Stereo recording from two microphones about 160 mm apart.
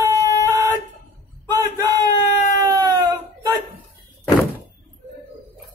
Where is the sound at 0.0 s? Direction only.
20° right (ahead or behind).